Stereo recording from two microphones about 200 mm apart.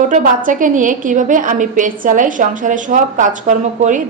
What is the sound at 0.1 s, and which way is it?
A woman's voice, 40° right (ahead or behind).